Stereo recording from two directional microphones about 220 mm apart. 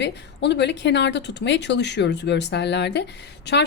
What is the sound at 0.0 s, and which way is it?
Speech, 50° left (ahead or behind).